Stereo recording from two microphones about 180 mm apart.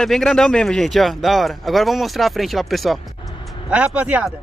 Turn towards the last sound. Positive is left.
turn(degrees=-10)  # may be behind; listen again after turning